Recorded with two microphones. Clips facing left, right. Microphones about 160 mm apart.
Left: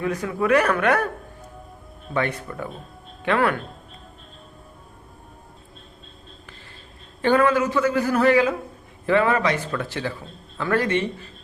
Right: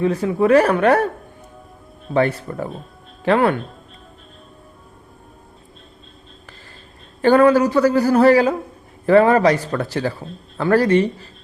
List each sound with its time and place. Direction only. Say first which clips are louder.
0.0 s speech: right 7 dB; 30° right (ahead or behind)
2.1 s speech: right 7 dB; 35° right (ahead or behind)
7.2 s speech: right 6 dB; 35° right (ahead or behind)